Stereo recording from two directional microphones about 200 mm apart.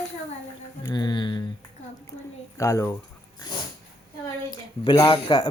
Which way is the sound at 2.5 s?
15° left (ahead or behind).